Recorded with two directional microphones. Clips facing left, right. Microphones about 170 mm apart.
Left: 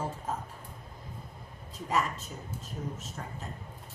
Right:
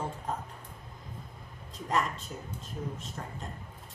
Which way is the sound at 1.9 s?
5° left (ahead or behind).